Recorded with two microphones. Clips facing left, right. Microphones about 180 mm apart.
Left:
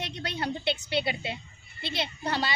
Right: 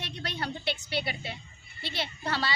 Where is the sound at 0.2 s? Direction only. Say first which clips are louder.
Left 2 dB; 20° left (ahead or behind).